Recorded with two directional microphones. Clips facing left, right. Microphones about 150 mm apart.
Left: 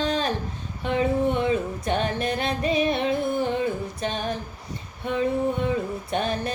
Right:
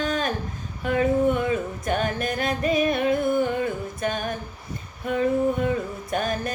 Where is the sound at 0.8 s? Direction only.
25° left (ahead or behind).